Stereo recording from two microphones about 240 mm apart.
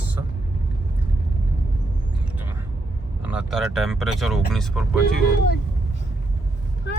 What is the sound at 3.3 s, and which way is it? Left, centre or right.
Speech, centre.